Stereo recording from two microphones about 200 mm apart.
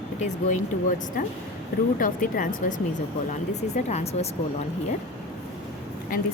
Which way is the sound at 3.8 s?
35° left (ahead or behind).